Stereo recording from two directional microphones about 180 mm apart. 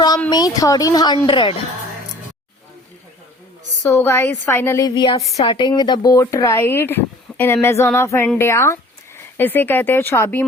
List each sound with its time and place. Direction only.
0.3 s speech: 20° left (ahead or behind)
3.8 s speech: 15° left (ahead or behind)